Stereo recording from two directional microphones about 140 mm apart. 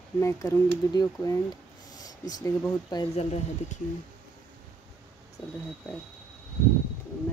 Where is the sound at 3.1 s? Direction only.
50° left (ahead or behind).